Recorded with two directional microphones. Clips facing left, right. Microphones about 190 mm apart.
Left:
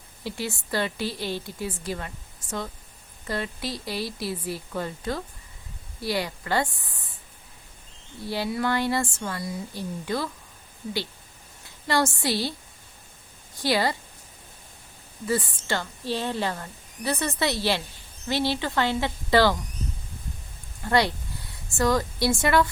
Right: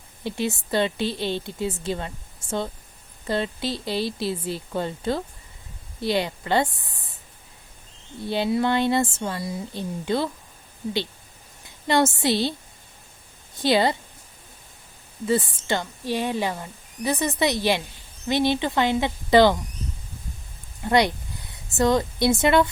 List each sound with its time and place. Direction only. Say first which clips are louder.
0.3 s speech: right 5 dB; 20° right (ahead or behind)
8.3 s speech: right 4 dB; 25° right (ahead or behind)
11.6 s a woman's voice: right 4 dB; 20° right (ahead or behind)
13.6 s speech: right 4 dB; 20° right (ahead or behind)
15.3 s speech: right 4 dB; 20° right (ahead or behind)
20.8 s speech: right 3 dB; 20° right (ahead or behind)